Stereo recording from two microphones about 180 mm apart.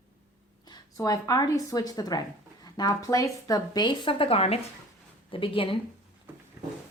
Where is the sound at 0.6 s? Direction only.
20° left (ahead or behind).